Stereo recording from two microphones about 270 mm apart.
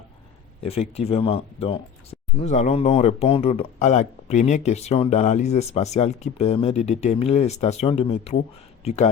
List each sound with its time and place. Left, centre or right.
0.6 s speech: left